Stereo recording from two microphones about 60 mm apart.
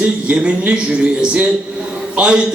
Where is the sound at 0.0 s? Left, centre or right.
Centre.